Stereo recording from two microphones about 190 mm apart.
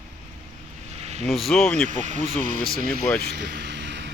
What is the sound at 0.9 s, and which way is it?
Vehicle, 35° right (ahead or behind).